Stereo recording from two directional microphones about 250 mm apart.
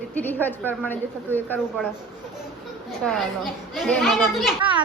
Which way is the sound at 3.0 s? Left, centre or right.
Centre.